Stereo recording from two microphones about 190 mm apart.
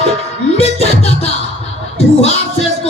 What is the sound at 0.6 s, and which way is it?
Music, 35° left (ahead or behind).